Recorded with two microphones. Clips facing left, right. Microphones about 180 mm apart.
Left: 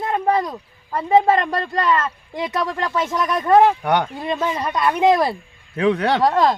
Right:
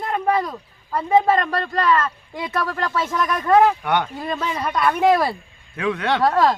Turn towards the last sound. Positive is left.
turn(degrees=20)  # may be behind; listen again after turning